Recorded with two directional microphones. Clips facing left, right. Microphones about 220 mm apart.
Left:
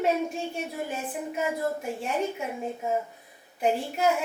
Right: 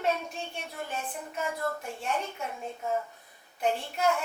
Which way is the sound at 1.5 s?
15° left (ahead or behind).